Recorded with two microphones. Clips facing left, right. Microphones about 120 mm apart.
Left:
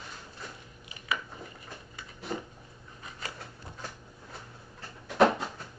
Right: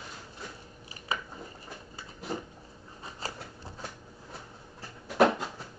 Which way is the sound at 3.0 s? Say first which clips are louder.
Right 2 dB; 30° right (ahead or behind).